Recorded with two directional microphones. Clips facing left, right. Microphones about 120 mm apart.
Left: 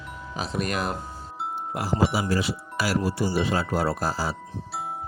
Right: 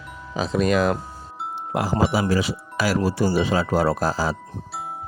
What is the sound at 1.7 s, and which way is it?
Speech, 90° right.